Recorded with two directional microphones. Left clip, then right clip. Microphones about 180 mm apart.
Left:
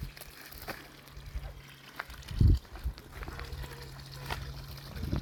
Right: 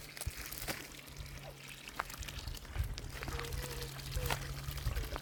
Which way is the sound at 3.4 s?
50° right (ahead or behind).